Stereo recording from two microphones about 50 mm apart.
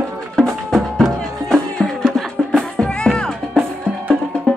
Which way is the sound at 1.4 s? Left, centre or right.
Centre.